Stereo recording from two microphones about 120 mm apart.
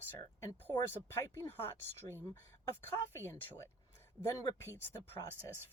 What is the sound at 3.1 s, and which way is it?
Speech, 20° left (ahead or behind).